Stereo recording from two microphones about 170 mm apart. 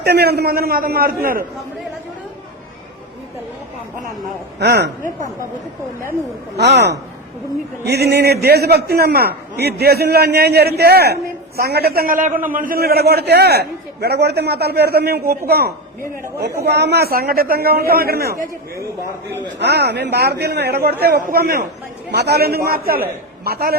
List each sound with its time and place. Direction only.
0.0 s a man's voice: 70° right (ahead or behind)
4.6 s a man's voice: 75° right (ahead or behind)
6.6 s a man's voice: 75° right (ahead or behind)
16.6 s a man's voice: 80° right
19.5 s a man's voice: 75° right (ahead or behind)
22.1 s a man's voice: 70° right (ahead or behind)